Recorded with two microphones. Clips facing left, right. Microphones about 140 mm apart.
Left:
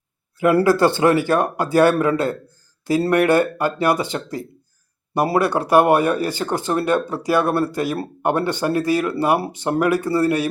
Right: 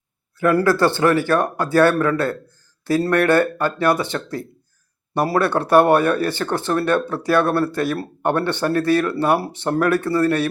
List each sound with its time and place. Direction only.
0.6 s a man's voice: 20° left (ahead or behind)
5.5 s a man's voice: 10° left (ahead or behind)